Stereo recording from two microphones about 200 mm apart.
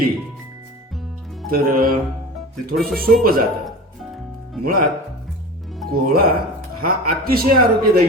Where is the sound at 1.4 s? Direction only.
45° right (ahead or behind).